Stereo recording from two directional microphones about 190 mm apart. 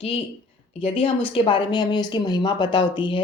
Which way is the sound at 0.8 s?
30° left (ahead or behind).